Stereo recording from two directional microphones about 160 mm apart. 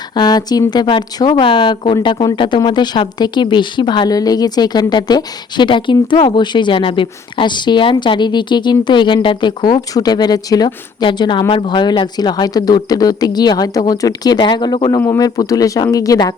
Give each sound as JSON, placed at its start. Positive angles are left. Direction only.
{"t": 0.1, "sound": "speech", "side_deg": 25}